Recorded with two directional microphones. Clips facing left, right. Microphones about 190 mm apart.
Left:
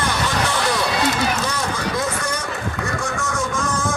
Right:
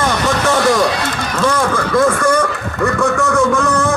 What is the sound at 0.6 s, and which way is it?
Run, 50° right (ahead or behind).